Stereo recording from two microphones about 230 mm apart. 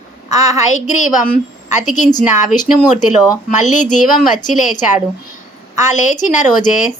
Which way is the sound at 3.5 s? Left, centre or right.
Left.